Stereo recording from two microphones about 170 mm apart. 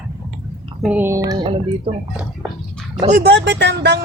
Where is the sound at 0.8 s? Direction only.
10° right (ahead or behind).